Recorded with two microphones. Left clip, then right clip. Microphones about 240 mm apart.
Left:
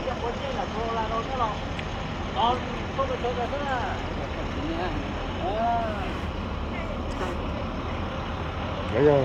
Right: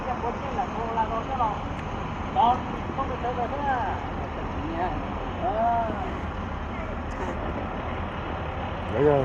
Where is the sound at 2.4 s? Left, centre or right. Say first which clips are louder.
Right 3 dB; centre.